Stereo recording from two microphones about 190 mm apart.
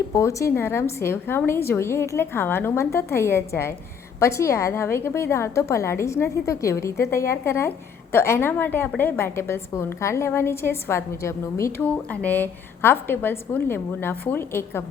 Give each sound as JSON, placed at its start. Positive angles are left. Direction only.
{"t": 0.1, "sound": "a woman's voice", "side_deg": 15}